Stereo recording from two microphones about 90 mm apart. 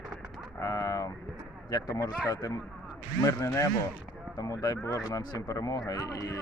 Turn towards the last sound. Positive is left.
turn(degrees=40)  # may be behind; listen again after turning